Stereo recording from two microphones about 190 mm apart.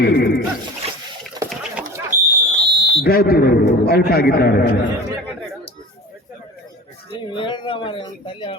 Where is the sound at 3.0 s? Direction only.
50° left (ahead or behind).